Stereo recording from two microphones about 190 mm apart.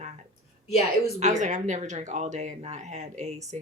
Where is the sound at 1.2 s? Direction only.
40° right (ahead or behind).